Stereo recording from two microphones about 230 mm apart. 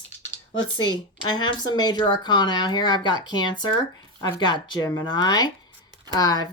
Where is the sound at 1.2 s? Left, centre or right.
Centre.